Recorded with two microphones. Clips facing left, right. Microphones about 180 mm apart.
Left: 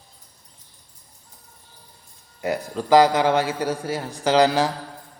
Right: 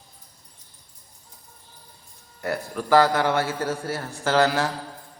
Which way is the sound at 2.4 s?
15° left (ahead or behind).